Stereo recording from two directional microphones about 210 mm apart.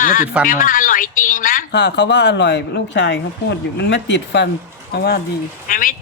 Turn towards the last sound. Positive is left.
turn(degrees=40)  # may be behind; listen again after turning